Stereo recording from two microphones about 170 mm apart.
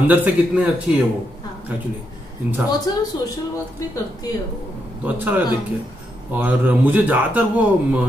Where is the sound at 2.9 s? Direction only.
25° left (ahead or behind).